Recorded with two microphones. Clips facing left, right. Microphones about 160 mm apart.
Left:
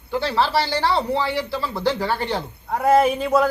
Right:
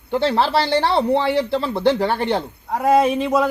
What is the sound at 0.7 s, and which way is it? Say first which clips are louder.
Speech: right 3 dB; 25° right (ahead or behind).